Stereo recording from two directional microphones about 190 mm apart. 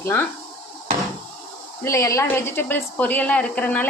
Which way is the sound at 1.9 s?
15° left (ahead or behind).